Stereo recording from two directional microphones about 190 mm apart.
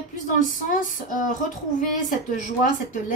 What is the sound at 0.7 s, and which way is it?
A woman's voice, 45° left (ahead or behind).